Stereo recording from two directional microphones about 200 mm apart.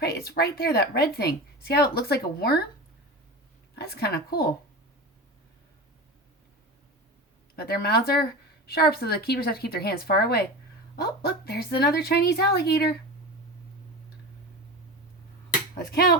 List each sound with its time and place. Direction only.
0.0 s speech: 50° left (ahead or behind)
3.8 s speech: 50° left (ahead or behind)
7.5 s speech: 50° left (ahead or behind)